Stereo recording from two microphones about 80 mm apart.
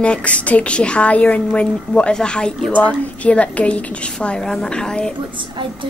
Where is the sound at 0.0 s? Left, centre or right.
Centre.